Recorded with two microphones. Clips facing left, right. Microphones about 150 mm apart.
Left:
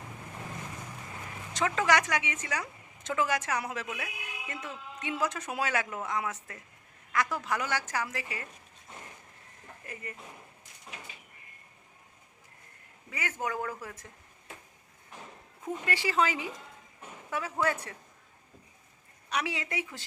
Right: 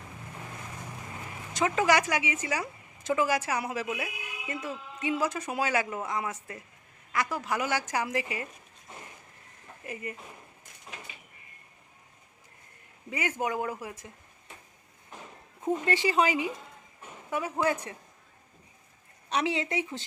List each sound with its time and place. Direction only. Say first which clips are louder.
1.5 s a woman's voice: right 2 dB; 10° right (ahead or behind)
9.8 s speech: right 6 dB; 15° right (ahead or behind)
13.1 s a woman's voice: right 4 dB; 20° right (ahead or behind)
15.6 s a woman's voice: right 6 dB; 25° right (ahead or behind)
19.3 s speech: right 5 dB; 25° right (ahead or behind)